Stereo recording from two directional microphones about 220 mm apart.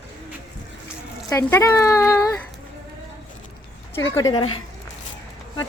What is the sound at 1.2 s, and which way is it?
Speech, 15° left (ahead or behind).